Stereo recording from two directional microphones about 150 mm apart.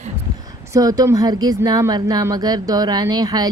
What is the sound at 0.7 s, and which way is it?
Speech, 25° right (ahead or behind).